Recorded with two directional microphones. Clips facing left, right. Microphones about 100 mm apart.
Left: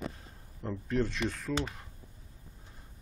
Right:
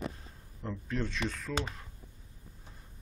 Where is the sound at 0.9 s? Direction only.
5° left (ahead or behind).